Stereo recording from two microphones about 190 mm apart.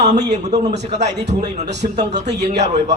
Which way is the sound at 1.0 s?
65° right (ahead or behind).